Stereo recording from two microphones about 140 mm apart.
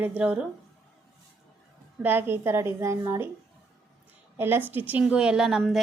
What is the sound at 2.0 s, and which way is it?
A woman's voice, 15° right (ahead or behind).